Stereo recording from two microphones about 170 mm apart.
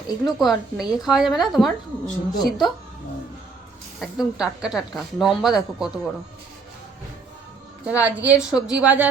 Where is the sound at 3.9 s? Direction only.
Centre (ahead or behind).